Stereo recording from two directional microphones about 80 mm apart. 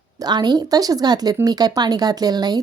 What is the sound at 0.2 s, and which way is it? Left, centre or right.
Speech, right.